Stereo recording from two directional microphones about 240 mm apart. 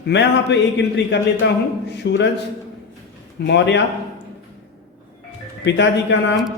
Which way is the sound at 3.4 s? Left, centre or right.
Left.